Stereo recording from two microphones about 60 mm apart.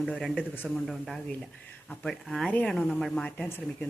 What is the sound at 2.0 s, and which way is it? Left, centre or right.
Speech, centre.